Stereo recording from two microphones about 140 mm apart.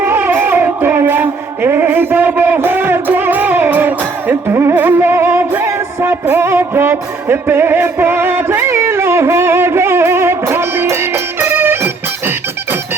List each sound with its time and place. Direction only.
0.0 s music: 15° right (ahead or behind)